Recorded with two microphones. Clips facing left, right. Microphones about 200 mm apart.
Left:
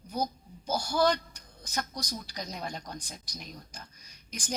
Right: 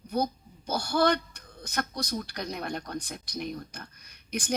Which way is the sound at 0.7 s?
60° right (ahead or behind).